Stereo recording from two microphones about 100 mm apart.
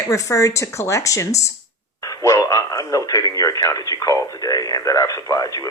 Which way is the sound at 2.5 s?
30° left (ahead or behind).